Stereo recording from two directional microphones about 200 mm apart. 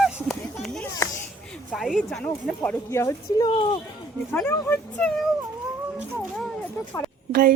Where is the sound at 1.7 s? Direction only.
Centre (ahead or behind); by 3.8 s 25° left (ahead or behind).